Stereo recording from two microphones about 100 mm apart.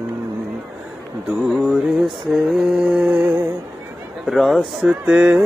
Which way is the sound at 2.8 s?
10° right (ahead or behind).